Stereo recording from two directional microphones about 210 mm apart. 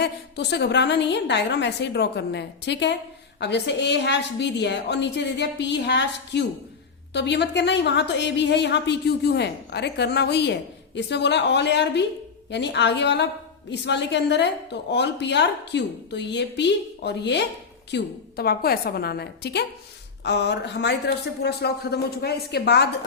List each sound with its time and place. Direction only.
0.0 s a woman's voice: 50° left (ahead or behind)